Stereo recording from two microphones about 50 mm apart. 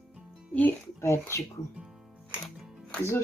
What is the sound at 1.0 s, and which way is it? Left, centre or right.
Speech, left.